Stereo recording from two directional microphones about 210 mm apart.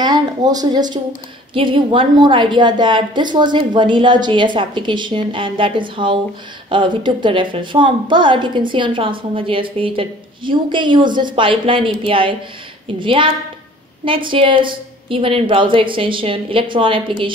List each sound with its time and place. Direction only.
0.0 s a woman's voice: 20° right (ahead or behind)